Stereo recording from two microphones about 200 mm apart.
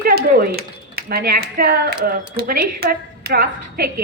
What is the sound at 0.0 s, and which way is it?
A woman's voice, 50° right (ahead or behind).